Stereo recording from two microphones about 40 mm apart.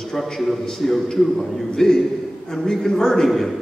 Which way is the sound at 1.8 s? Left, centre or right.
Centre.